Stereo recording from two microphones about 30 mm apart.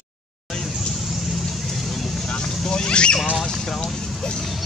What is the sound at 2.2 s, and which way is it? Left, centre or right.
Vehicle, left.